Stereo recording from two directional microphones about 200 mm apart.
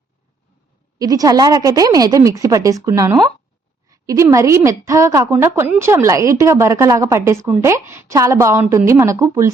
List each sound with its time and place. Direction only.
0.9 s a woman's voice: 20° right (ahead or behind)